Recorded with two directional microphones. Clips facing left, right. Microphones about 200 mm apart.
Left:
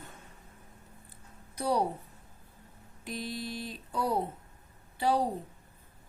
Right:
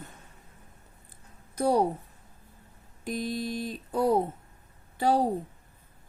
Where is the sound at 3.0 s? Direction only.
45° right (ahead or behind).